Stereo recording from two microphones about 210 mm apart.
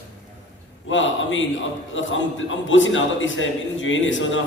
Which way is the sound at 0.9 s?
65° left (ahead or behind).